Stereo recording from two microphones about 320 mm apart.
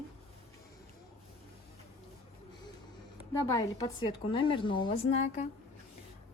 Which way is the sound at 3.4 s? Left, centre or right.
Centre.